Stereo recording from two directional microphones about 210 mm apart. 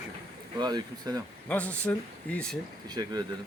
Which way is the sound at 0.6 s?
20° right (ahead or behind).